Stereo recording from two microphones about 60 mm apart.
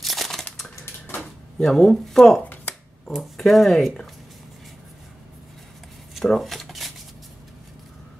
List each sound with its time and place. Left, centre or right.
0.0 s crushing: centre
1.6 s speech: centre
6.2 s a sound: centre